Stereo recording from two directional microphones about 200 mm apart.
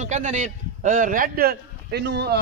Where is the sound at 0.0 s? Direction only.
35° right (ahead or behind).